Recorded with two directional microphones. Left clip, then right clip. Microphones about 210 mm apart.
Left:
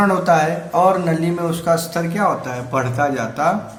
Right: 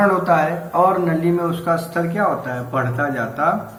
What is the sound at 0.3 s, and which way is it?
A man's voice, 55° left (ahead or behind).